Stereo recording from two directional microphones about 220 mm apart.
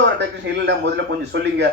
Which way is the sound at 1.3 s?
55° right (ahead or behind).